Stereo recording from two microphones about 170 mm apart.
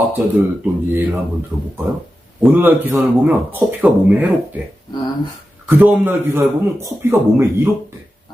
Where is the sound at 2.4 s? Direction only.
10° right (ahead or behind).